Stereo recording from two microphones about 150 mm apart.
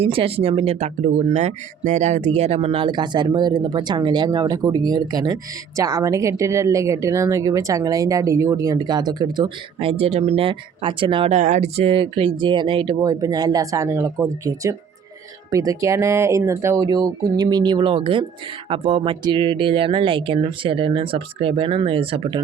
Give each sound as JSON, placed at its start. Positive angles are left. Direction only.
{"t": 0.0, "sound": "speech", "side_deg": -40}
{"t": 11.3, "sound": "speech", "side_deg": -55}
{"t": 13.0, "sound": "speech", "side_deg": -25}